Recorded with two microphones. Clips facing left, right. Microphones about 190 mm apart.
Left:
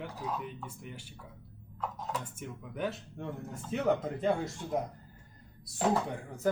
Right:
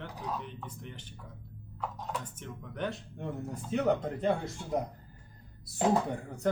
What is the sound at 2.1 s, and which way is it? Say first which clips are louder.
Speech: left 1 dB; 10° left (ahead or behind).